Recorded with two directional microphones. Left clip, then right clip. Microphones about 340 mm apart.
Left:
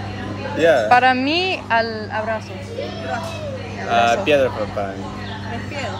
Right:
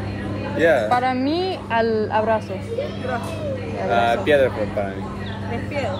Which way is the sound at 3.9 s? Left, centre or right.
Left.